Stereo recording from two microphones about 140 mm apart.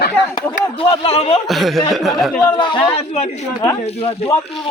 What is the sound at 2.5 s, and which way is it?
Speech, 35° left (ahead or behind).